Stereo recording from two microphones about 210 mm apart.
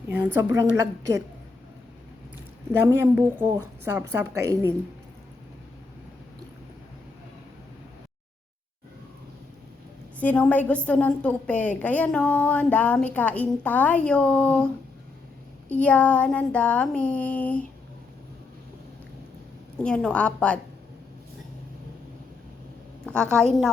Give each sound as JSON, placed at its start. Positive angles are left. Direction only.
{"t": 0.1, "sound": "a woman's voice", "side_deg": -10}
{"t": 2.8, "sound": "a woman's voice", "side_deg": -10}
{"t": 10.2, "sound": "a woman's voice", "side_deg": 5}
{"t": 15.7, "sound": "a woman's voice", "side_deg": 5}
{"t": 19.8, "sound": "a woman's voice", "side_deg": 5}
{"t": 23.0, "sound": "a woman's voice", "side_deg": 5}